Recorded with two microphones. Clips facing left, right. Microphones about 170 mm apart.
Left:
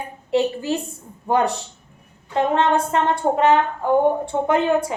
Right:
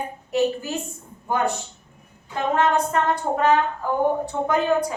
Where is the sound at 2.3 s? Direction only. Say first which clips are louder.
Left 2 dB; 30° left (ahead or behind).